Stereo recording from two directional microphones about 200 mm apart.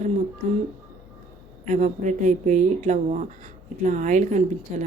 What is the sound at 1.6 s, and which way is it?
Speech, 35° right (ahead or behind).